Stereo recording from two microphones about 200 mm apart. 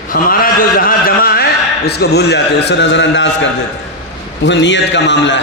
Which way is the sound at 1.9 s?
55° left (ahead or behind).